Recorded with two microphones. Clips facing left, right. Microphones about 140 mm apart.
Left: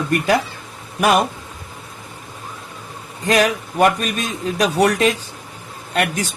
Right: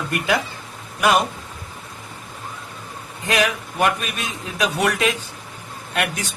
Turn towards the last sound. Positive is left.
turn(degrees=35)  # may be behind; listen again after turning